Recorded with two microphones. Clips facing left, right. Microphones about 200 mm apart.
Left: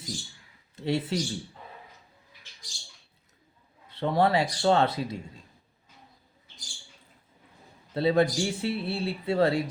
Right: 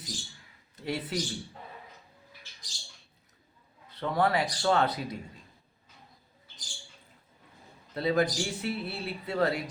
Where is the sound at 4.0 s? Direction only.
25° left (ahead or behind).